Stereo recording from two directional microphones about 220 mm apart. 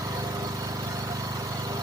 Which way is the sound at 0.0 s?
15° right (ahead or behind).